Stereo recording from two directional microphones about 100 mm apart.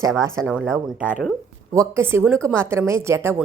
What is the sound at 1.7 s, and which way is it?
A woman's voice, 25° right (ahead or behind).